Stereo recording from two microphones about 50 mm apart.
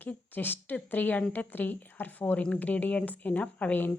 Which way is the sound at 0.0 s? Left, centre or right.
Left.